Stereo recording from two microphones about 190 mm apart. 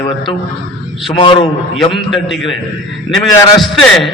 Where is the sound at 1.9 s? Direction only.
Centre (ahead or behind).